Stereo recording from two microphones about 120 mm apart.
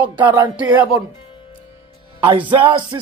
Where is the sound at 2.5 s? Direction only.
40° right (ahead or behind).